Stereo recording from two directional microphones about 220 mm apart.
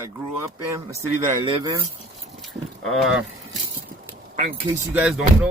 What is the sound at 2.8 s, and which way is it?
Speech, centre (ahead or behind).